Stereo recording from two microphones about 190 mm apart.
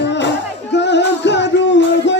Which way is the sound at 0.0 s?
65° left (ahead or behind).